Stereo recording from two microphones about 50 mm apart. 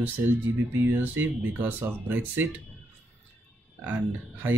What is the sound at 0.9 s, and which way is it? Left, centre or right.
Speech, right.